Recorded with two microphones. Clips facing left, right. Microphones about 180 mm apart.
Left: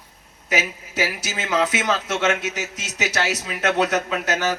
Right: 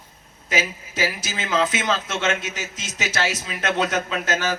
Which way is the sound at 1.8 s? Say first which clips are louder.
Left 1 dB; 15° left (ahead or behind).